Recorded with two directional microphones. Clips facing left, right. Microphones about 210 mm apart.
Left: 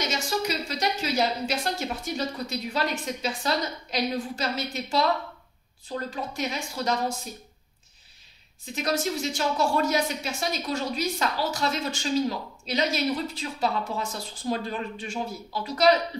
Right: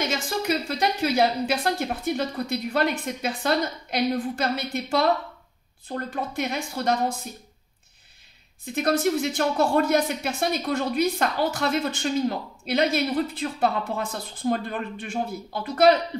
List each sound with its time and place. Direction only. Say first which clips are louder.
0.0 s speech: right 1 dB; 55° right (ahead or behind)
8.7 s speech: right 5 dB; 55° right (ahead or behind)